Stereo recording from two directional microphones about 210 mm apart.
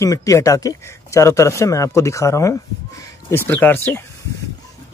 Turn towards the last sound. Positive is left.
turn(degrees=10)  # may be behind; listen again after turning